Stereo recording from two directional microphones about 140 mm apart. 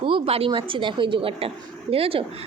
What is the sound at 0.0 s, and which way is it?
A woman's voice, 40° right (ahead or behind).